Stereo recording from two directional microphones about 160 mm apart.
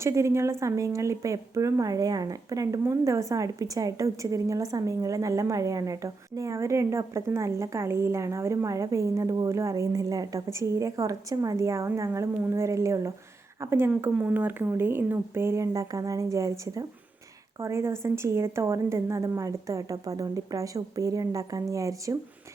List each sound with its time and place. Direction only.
0.0 s speech: 20° right (ahead or behind)